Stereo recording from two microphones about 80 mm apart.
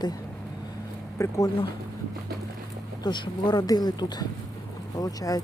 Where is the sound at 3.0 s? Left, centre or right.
Left.